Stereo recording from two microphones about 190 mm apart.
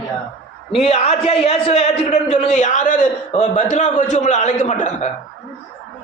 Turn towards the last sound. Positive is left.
turn(degrees=40)  # may be behind; listen again after turning